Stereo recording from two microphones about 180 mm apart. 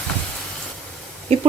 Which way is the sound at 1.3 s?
35° right (ahead or behind).